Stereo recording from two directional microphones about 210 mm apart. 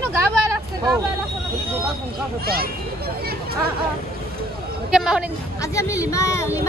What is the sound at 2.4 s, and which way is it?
Speech, 45° right (ahead or behind).